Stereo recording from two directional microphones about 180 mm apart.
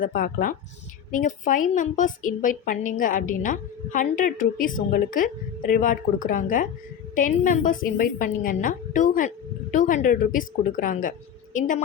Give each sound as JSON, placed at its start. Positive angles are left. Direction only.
{"t": 0.0, "sound": "a woman's voice", "side_deg": 50}